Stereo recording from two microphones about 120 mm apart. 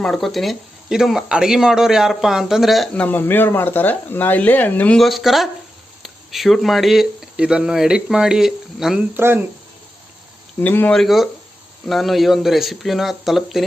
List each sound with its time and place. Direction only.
0.0 s speech: 5° left (ahead or behind)
2.9 s speech: 15° left (ahead or behind)
4.9 s speech: centre (ahead or behind)
9.1 s speech: 20° right (ahead or behind)
10.6 s speech: 15° left (ahead or behind)
10.9 s speech: centre (ahead or behind)